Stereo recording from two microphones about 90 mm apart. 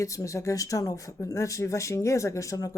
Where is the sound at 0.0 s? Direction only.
35° left (ahead or behind).